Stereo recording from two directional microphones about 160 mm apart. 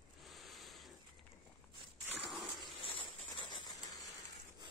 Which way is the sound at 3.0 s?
30° left (ahead or behind).